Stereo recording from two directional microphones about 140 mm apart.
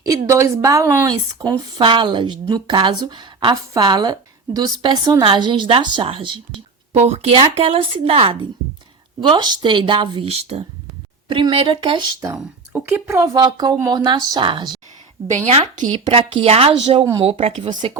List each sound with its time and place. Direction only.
0.0 s speech: 20° right (ahead or behind)
12.7 s speech: 15° right (ahead or behind); by 14.8 s 35° right (ahead or behind)
15.4 s speech: 50° right (ahead or behind)
15.9 s speech: 40° right (ahead or behind)